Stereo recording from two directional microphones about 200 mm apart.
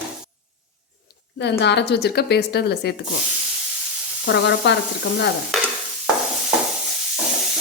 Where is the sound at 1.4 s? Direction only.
60° left (ahead or behind).